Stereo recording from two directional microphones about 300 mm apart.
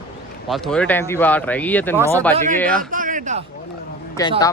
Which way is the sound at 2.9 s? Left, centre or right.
Right.